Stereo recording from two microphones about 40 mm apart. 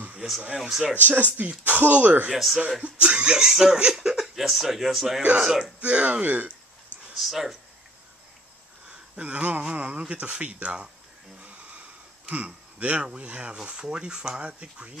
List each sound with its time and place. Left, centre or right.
0.6 s speech: centre
0.9 s speech: right
2.3 s speech: centre
2.8 s speech: right
3.2 s speech: centre
5.8 s speech: right
7.2 s speech: centre
9.2 s speech: right
11.4 s a sound: right
12.7 s speech: right